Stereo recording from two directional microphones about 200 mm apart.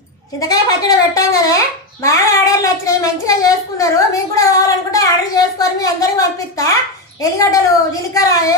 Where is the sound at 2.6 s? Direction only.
15° left (ahead or behind).